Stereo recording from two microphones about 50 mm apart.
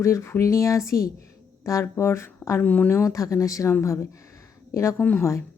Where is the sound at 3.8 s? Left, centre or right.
Left.